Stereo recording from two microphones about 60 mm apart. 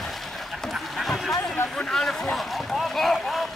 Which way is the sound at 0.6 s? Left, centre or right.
Centre.